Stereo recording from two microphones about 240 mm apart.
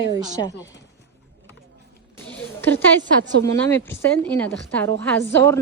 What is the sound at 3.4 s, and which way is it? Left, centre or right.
A woman's voice, centre.